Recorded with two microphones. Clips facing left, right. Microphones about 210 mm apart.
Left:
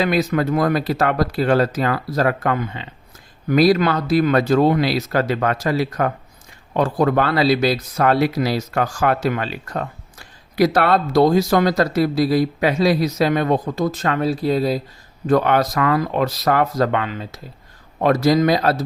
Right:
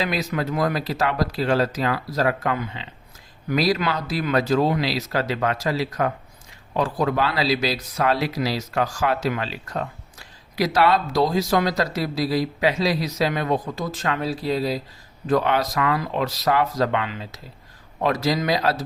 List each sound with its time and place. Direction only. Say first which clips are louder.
0.0 s speech: left 6 dB; 55° left (ahead or behind)